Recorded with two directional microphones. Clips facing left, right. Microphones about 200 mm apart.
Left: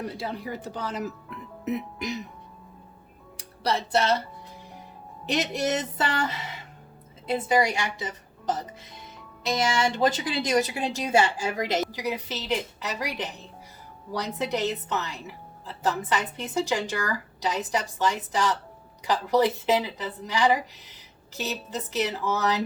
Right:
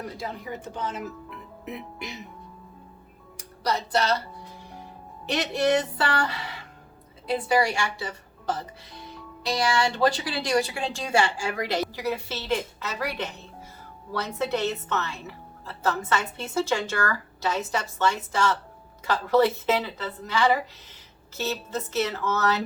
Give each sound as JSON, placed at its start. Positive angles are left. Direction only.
{"t": 0.0, "sound": "speech", "side_deg": 30}
{"t": 3.3, "sound": "speech", "side_deg": 30}
{"t": 5.7, "sound": "a woman's voice", "side_deg": 20}
{"t": 14.3, "sound": "a woman's voice", "side_deg": 15}